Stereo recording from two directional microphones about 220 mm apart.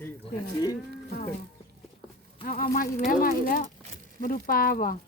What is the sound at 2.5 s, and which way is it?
Speech, 40° left (ahead or behind).